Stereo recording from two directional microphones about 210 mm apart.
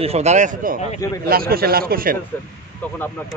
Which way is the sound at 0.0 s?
30° right (ahead or behind).